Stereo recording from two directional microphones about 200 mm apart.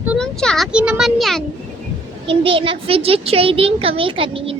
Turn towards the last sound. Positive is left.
turn(degrees=-25)  # may be behind; listen again after turning